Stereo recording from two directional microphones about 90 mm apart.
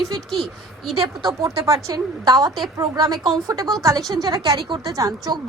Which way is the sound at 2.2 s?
50° right (ahead or behind).